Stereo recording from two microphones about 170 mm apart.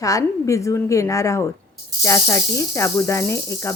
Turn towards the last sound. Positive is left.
turn(degrees=15)  # may be behind; listen again after turning